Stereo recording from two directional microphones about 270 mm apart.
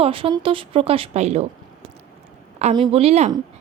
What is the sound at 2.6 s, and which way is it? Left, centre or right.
Speech, centre.